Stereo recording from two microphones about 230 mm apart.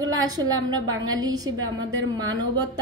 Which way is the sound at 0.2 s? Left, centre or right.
Centre.